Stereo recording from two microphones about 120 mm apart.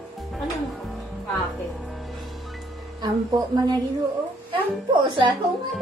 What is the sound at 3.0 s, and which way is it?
A woman's voice, 35° right (ahead or behind).